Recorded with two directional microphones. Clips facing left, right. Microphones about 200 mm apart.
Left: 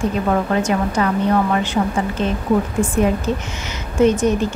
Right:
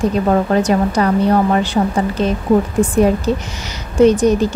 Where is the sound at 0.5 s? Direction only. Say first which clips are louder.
Right 4 dB; 35° right (ahead or behind).